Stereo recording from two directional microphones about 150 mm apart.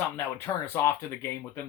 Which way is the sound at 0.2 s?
15° left (ahead or behind).